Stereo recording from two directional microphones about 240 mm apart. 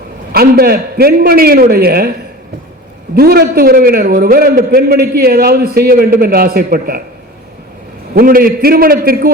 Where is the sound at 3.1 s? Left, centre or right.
Right.